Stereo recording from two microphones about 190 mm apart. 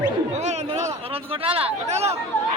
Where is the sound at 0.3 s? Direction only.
35° right (ahead or behind).